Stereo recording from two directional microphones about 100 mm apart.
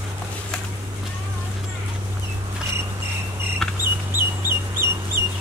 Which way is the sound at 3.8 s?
20° right (ahead or behind).